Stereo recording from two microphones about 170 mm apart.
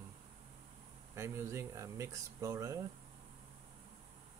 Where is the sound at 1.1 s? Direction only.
15° right (ahead or behind).